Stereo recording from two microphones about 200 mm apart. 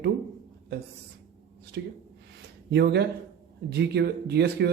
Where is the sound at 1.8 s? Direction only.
60° right (ahead or behind).